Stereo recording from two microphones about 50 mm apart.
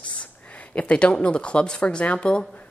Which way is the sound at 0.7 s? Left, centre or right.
Left.